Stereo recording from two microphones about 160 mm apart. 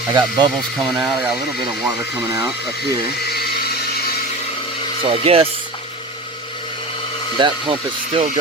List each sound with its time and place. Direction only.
0.1 s speech: 25° right (ahead or behind)
0.9 s speech: 10° right (ahead or behind)
5.0 s speech: 40° right (ahead or behind)
7.3 s speech: 30° right (ahead or behind)